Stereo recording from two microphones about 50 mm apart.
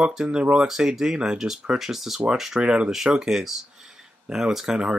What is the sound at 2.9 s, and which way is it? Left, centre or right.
Speech, centre.